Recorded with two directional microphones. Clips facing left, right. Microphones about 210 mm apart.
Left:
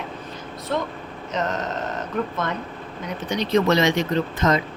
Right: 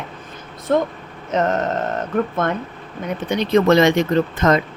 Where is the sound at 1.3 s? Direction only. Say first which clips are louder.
Right 7 dB; 50° right (ahead or behind).